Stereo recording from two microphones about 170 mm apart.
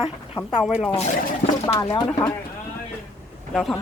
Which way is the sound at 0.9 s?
40° left (ahead or behind).